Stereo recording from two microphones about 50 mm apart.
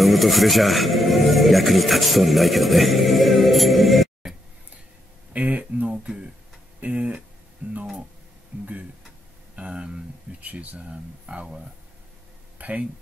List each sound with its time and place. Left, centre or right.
0.0 s speech: centre
5.3 s speech: right
9.7 s speech: centre
10.4 s speech: right